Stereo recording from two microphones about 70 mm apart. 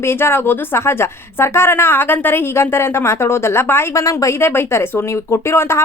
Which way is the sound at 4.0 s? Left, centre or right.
Left.